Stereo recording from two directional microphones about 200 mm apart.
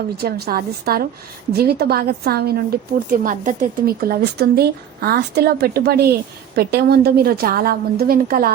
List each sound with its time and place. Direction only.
0.2 s speech: 50° right (ahead or behind)